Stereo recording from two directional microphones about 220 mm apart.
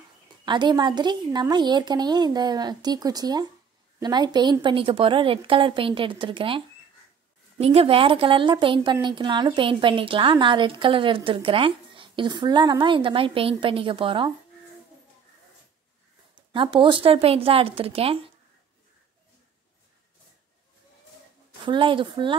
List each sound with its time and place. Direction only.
0.5 s a woman's voice: 20° right (ahead or behind)
16.3 s a woman's voice: 20° right (ahead or behind)
21.6 s a woman's voice: 20° right (ahead or behind)